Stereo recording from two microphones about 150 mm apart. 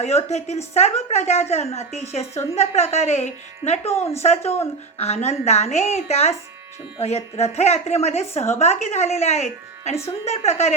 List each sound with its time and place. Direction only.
0.0 s a woman's voice: 45° left (ahead or behind)